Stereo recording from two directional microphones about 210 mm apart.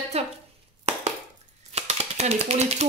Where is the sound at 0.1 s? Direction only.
30° right (ahead or behind).